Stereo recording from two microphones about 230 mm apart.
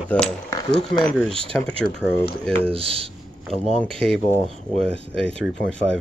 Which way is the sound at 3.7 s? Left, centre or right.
Centre.